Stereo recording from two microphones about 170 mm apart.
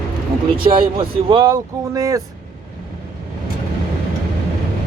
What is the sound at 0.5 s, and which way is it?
Speech, 30° right (ahead or behind).